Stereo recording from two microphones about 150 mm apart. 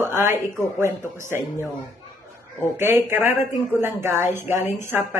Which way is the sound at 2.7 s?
15° right (ahead or behind).